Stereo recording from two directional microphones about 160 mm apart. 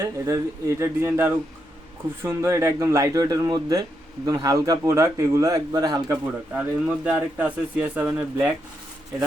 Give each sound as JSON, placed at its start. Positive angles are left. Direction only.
{"t": 0.0, "sound": "speech", "side_deg": -20}
{"t": 6.5, "sound": "speech", "side_deg": -5}